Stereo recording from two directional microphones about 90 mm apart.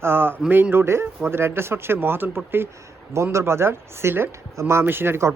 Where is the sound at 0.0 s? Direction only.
25° right (ahead or behind).